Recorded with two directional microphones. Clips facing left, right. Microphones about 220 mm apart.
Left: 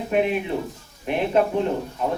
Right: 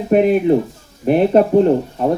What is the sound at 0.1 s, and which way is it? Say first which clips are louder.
Speech: right 10 dB; 40° right (ahead or behind).